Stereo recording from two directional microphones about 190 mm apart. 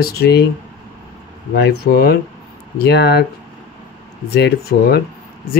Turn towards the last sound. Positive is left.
turn(degrees=60)  # may be behind; listen again after turning